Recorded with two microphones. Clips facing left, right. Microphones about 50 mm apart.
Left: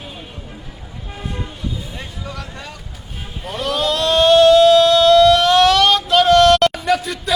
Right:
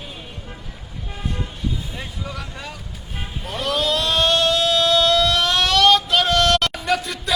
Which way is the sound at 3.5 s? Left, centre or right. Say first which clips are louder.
Left 2 dB; centre.